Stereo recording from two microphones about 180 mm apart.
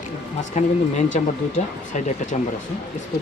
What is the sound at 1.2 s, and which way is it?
Speech, 40° left (ahead or behind).